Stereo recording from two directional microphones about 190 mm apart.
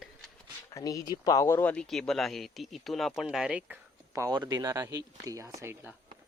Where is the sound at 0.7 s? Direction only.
15° left (ahead or behind); by 6.0 s 10° right (ahead or behind).